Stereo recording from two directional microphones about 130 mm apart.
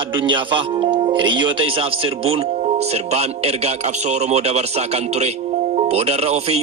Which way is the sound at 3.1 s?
55° right (ahead or behind).